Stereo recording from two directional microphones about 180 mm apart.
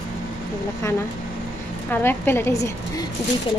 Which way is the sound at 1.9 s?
10° left (ahead or behind).